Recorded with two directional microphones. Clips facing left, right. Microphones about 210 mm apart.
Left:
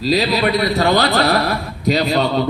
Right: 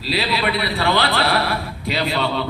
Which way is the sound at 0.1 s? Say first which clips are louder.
Left 5 dB; 40° left (ahead or behind).